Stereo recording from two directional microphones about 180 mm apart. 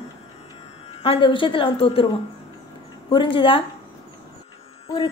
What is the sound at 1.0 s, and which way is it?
A woman's voice, 30° left (ahead or behind).